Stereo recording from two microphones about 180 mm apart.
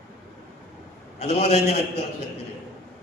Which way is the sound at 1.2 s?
40° left (ahead or behind).